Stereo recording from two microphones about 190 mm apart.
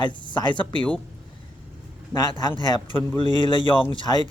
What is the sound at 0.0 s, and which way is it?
Speech, 25° left (ahead or behind).